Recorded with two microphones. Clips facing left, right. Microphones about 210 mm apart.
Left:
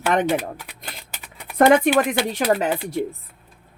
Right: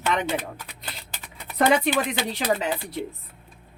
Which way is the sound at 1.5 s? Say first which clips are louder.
Left 6 dB; 50° left (ahead or behind).